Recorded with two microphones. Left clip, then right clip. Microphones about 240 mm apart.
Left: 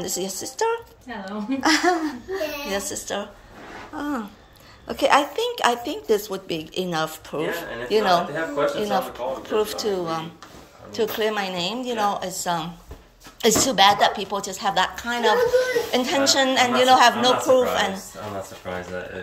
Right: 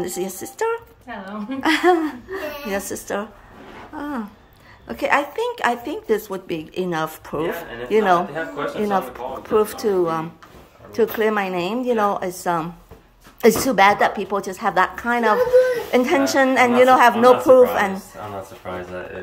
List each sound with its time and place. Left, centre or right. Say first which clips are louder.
0.0 s speech: right 2 dB; centre
3.9 s a woman's voice: even; centre